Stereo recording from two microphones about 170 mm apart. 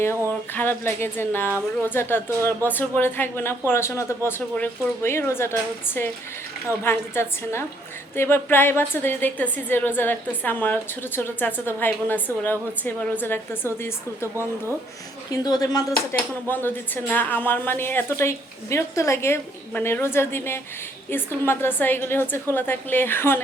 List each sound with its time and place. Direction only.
0.5 s a woman's voice: 10° left (ahead or behind)
15.3 s speech: 20° left (ahead or behind)
16.1 s a woman's voice: 10° left (ahead or behind)